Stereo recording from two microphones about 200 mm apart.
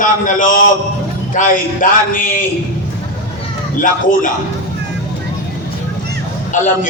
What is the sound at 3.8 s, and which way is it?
Speech, 40° left (ahead or behind).